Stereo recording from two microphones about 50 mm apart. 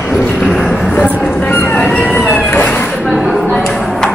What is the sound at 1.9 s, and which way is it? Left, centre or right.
Emergency vehicle, left.